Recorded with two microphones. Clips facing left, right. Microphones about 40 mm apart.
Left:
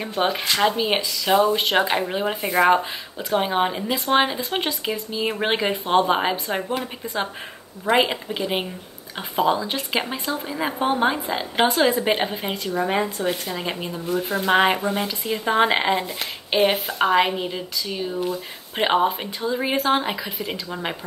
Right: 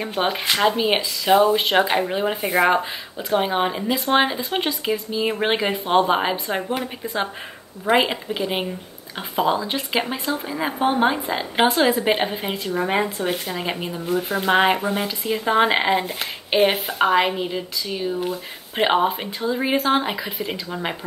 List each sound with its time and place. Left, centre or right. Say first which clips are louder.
0.0 s speech: even; centre